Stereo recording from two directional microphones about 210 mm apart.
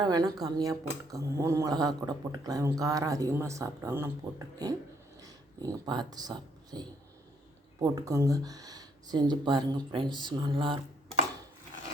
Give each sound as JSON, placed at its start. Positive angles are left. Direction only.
{"t": 0.0, "sound": "speech", "side_deg": -20}